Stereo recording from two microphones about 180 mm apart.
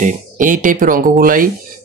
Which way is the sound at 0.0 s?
45° right (ahead or behind).